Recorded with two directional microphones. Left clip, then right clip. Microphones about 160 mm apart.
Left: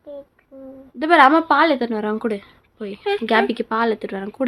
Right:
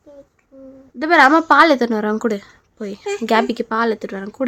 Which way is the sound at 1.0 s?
15° right (ahead or behind).